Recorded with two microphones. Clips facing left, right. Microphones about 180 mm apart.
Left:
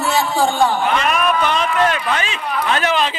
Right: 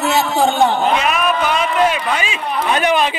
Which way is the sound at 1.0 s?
5° right (ahead or behind).